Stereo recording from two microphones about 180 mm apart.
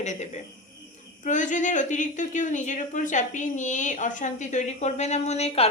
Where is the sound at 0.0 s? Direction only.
40° left (ahead or behind).